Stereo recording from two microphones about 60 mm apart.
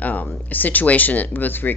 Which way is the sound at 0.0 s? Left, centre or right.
Left.